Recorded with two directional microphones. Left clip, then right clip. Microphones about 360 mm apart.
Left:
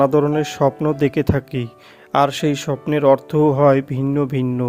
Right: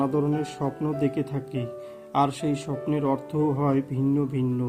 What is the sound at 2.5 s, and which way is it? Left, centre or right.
A man's voice, left.